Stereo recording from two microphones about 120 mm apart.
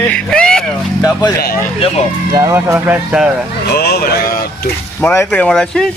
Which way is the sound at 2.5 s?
15° right (ahead or behind).